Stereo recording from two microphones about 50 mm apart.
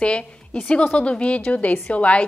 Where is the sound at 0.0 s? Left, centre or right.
Left.